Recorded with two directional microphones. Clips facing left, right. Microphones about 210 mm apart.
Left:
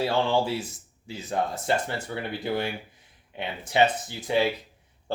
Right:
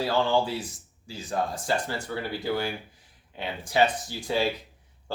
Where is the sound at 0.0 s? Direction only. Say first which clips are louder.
Even; 25° left (ahead or behind).